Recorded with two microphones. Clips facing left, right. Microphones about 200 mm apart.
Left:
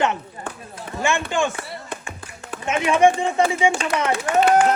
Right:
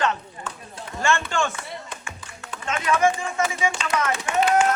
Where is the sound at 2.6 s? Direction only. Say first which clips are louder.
Left 5 dB; 25° left (ahead or behind).